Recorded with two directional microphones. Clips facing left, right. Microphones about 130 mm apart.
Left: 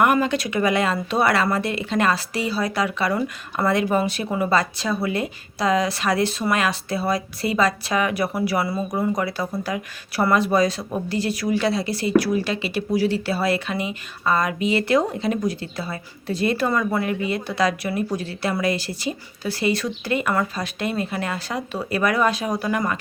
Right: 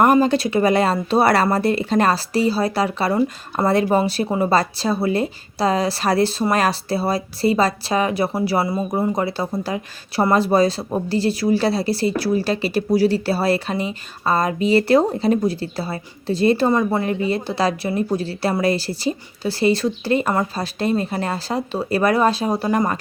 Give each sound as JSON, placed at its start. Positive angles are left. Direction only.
{"t": 0.0, "sound": "speech", "side_deg": -35}